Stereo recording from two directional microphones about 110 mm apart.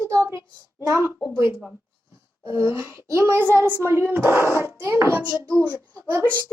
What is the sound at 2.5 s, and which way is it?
A child's voice, 20° right (ahead or behind).